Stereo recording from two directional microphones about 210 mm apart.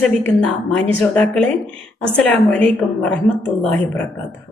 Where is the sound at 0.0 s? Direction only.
5° left (ahead or behind).